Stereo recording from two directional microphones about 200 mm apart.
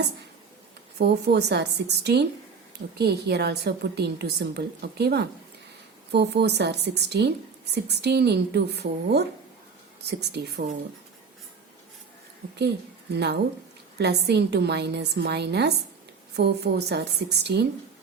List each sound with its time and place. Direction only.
0.9 s a woman's voice: 55° right (ahead or behind)
13.1 s a woman's voice: 55° right (ahead or behind)